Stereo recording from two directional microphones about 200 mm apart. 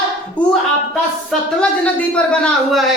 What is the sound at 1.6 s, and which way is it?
A man's voice, 5° left (ahead or behind).